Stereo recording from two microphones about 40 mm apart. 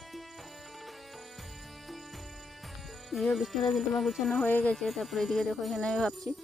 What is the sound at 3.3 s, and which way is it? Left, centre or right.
Speech, centre.